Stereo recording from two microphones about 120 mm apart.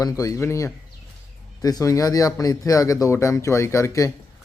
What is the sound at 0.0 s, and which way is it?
Speech, 30° left (ahead or behind).